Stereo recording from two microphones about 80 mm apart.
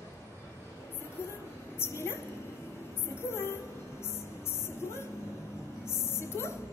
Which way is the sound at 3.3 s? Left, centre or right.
Left.